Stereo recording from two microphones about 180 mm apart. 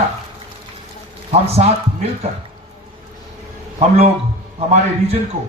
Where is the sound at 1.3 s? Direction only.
35° right (ahead or behind).